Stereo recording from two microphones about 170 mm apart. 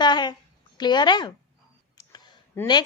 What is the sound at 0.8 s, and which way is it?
Speech, 25° left (ahead or behind).